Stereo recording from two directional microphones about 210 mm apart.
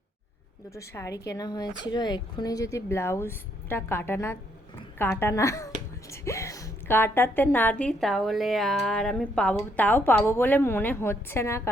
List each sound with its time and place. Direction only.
0.7 s a woman's voice: 15° left (ahead or behind)